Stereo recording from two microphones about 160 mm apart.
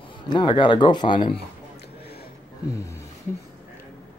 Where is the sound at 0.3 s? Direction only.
30° left (ahead or behind).